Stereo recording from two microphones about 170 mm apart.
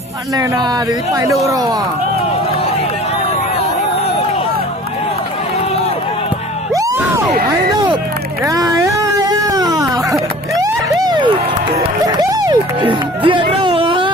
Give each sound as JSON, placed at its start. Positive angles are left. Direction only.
{"t": 0.3, "sound": "speech", "side_deg": -25}
{"t": 8.4, "sound": "a sound", "side_deg": -20}
{"t": 12.0, "sound": "music", "side_deg": -25}